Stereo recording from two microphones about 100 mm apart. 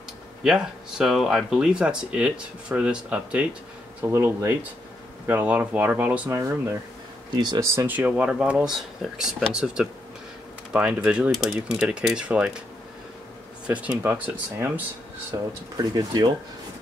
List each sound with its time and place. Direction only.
0.4 s speech: 5° right (ahead or behind)
4.1 s speech: 25° right (ahead or behind)
7.3 s speech: 45° right (ahead or behind)
7.6 s speech: 20° right (ahead or behind)
13.7 s speech: 15° right (ahead or behind)
15.3 s speech: 35° right (ahead or behind)